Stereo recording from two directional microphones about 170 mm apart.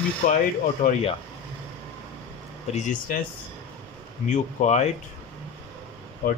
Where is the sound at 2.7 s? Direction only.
40° left (ahead or behind).